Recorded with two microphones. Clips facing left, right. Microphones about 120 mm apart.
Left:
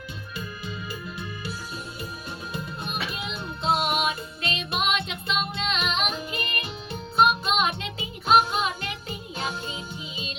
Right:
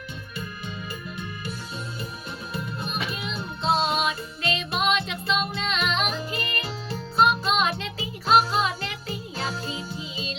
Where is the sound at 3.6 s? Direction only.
25° right (ahead or behind).